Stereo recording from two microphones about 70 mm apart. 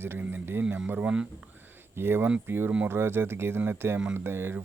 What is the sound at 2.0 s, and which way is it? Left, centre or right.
Speech, right.